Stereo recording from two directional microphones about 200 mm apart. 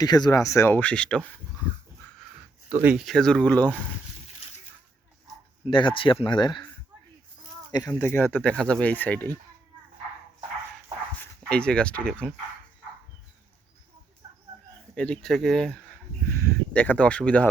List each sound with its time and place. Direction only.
0.0 s speech: 20° left (ahead or behind)
2.8 s speech: 5° right (ahead or behind)
5.7 s speech: 25° left (ahead or behind)
7.7 s speech: 15° left (ahead or behind)
11.2 s speech: 5° left (ahead or behind)
14.9 s speech: 5° left (ahead or behind)